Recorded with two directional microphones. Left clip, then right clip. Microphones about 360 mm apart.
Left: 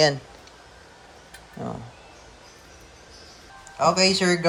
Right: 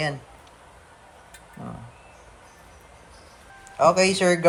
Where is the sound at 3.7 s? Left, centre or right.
Centre.